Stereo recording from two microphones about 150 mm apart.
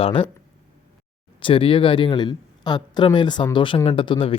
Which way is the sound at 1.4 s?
35° left (ahead or behind).